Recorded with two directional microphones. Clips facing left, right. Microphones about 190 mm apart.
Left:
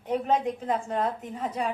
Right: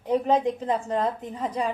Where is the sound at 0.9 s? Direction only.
35° right (ahead or behind).